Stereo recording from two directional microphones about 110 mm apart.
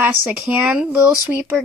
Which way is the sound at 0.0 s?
15° right (ahead or behind).